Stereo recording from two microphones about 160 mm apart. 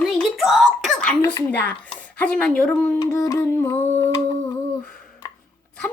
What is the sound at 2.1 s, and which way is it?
Speech, 10° left (ahead or behind).